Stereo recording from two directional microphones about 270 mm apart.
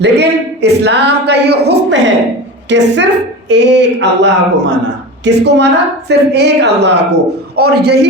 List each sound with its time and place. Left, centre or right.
0.0 s speech: right